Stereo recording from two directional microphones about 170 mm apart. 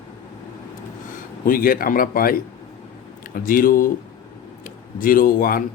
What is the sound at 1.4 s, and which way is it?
A man's voice, 55° left (ahead or behind).